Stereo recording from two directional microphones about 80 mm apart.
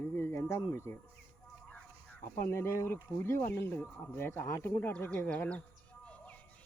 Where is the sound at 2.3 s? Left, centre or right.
Left.